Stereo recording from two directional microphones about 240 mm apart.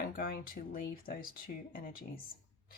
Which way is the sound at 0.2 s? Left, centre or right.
Left.